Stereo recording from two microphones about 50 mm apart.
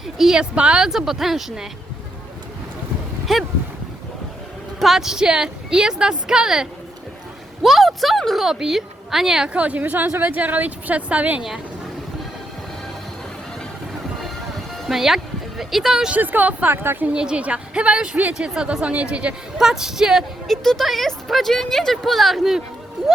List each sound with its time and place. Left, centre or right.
0.2 s a woman's voice: centre
0.5 s speech: right
0.9 s a woman's voice: centre
3.3 s speech: centre
4.8 s a woman's voice: centre
9.5 s a woman's voice: right
14.7 s speech: centre
16.1 s a woman's voice: right
16.6 s speech: right
17.1 s speech: centre
19.5 s a woman's voice: centre
20.5 s speech: centre